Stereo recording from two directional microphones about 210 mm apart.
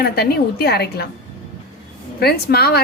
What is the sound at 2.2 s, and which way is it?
Speech, 50° left (ahead or behind).